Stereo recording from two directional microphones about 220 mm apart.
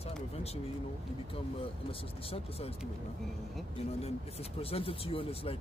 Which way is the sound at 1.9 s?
25° left (ahead or behind).